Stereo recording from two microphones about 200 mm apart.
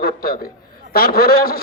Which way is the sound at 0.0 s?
50° left (ahead or behind).